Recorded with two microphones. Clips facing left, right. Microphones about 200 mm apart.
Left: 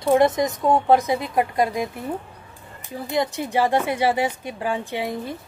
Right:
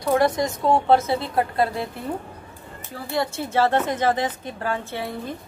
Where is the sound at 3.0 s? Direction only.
15° left (ahead or behind).